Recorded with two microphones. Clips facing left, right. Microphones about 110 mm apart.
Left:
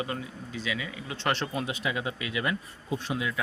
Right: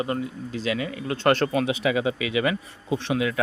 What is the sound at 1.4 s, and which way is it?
Speech, 80° right.